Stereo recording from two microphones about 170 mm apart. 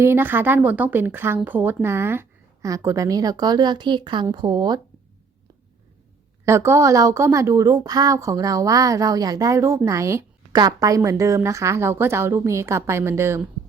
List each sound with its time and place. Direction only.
0.0 s a woman's voice: 15° right (ahead or behind)
6.4 s a woman's voice: 15° right (ahead or behind)